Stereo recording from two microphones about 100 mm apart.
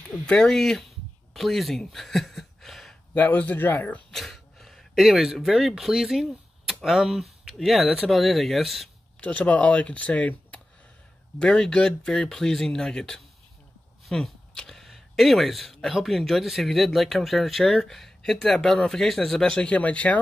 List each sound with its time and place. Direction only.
0.0 s speech: 10° left (ahead or behind)
1.3 s a sound: centre (ahead or behind)
3.2 s speech: 15° left (ahead or behind)
4.1 s speech: centre (ahead or behind)
9.2 s speech: 15° left (ahead or behind)